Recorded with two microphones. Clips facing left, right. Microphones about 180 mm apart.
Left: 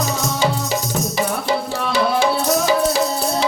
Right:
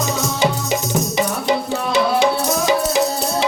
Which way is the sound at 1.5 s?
20° right (ahead or behind).